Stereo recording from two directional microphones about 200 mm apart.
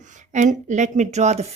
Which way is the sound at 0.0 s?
35° right (ahead or behind).